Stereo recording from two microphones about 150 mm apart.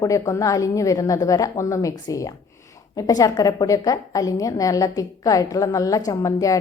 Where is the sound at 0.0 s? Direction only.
20° left (ahead or behind).